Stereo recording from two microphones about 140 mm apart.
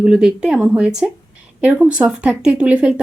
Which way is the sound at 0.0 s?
5° right (ahead or behind).